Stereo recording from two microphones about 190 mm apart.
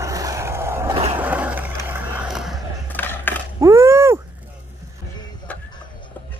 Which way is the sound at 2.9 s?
10° left (ahead or behind).